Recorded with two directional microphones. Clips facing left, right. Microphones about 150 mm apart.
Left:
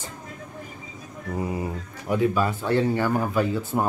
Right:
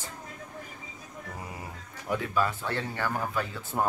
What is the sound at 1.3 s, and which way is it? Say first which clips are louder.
Speech: left 16 dB; 20° left (ahead or behind).